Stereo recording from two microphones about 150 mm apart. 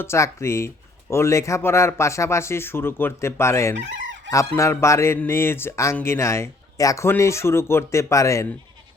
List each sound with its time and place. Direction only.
0.0 s speech: 20° left (ahead or behind)